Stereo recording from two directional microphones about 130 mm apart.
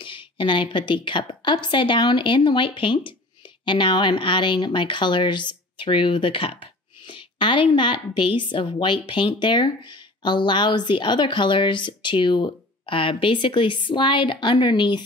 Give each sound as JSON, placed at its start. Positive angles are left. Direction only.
{"t": 0.0, "sound": "speech", "side_deg": 40}